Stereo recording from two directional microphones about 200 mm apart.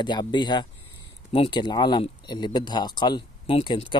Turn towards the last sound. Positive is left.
turn(degrees=25)  # may be behind; listen again after turning